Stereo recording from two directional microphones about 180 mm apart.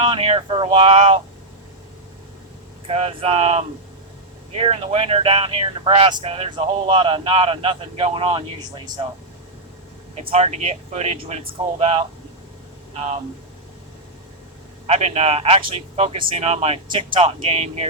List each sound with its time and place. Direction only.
0.0 s speech: 30° right (ahead or behind)
2.8 s speech: 35° right (ahead or behind)
10.2 s speech: 35° right (ahead or behind)
14.8 s speech: 35° right (ahead or behind)